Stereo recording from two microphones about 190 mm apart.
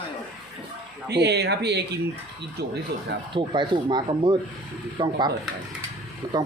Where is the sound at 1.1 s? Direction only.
60° right (ahead or behind).